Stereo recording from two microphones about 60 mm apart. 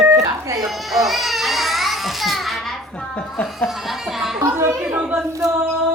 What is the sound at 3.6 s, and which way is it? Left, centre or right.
Speech, centre.